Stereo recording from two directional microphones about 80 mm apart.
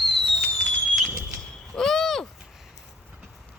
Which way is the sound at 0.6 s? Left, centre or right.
Centre.